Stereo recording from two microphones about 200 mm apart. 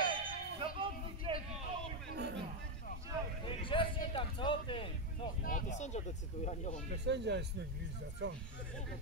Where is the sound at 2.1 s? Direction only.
55° right (ahead or behind).